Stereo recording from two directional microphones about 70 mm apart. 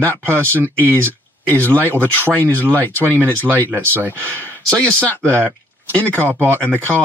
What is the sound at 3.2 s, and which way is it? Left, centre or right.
Speech, right.